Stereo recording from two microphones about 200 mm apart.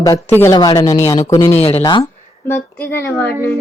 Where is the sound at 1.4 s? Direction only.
30° left (ahead or behind).